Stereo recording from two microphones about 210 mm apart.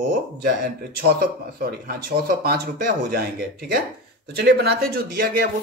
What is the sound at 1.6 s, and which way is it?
Speech, 45° right (ahead or behind).